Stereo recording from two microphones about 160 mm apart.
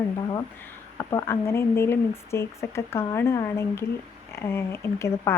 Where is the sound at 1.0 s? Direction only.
20° left (ahead or behind).